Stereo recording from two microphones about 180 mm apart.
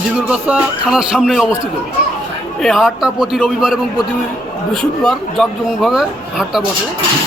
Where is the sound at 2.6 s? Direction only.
Centre (ahead or behind).